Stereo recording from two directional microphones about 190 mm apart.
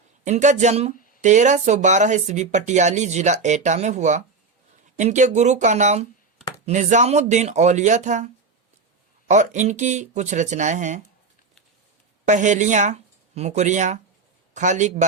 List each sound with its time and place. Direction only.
0.3 s speech: 40° right (ahead or behind)
12.2 s speech: 40° right (ahead or behind)